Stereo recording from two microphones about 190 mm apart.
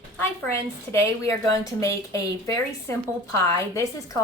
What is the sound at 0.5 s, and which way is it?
A woman's voice, 15° left (ahead or behind).